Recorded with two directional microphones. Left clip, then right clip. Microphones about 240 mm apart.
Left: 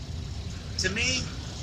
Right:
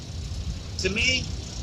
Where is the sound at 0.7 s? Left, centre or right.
Centre.